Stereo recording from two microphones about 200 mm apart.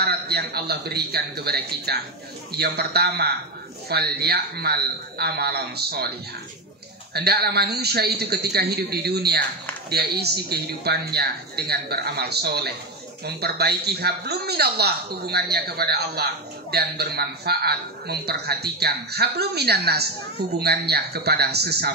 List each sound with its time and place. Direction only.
0.0 s a man's voice: 55° right (ahead or behind)
7.2 s a man's voice: 50° right (ahead or behind)